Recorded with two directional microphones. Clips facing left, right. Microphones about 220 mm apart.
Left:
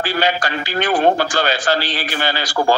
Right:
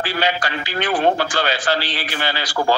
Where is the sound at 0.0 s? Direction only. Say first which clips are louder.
Left 2 dB; 45° left (ahead or behind).